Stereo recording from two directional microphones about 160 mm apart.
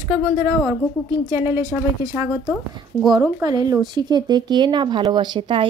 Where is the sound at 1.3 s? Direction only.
15° right (ahead or behind).